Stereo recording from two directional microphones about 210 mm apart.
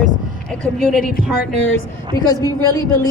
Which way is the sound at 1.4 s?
60° left (ahead or behind).